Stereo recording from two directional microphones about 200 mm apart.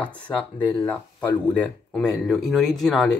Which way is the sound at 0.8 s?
5° left (ahead or behind).